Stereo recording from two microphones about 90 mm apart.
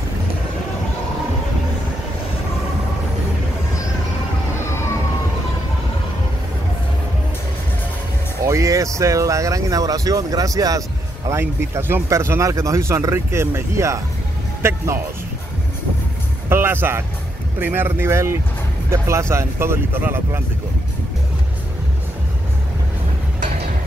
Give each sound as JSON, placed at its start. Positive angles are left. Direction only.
{"t": 8.5, "sound": "speech", "side_deg": -35}
{"t": 16.4, "sound": "speech", "side_deg": -25}